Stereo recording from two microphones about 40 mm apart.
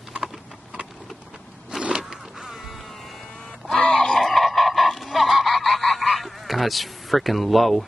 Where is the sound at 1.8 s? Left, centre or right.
Right.